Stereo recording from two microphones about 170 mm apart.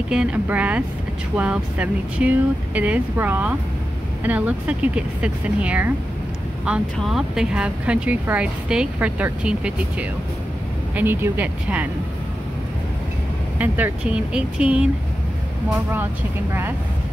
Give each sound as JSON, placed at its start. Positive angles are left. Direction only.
{"t": 0.1, "sound": "speech", "side_deg": -5}
{"t": 13.6, "sound": "speech", "side_deg": -10}